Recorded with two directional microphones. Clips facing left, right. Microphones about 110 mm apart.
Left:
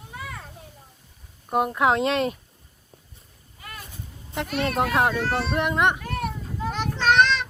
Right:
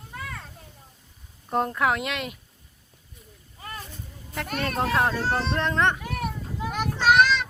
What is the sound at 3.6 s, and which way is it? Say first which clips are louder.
Boat: right 3 dB; 30° right (ahead or behind).